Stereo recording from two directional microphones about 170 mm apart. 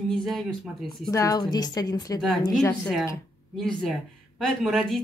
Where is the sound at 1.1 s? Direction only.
20° left (ahead or behind).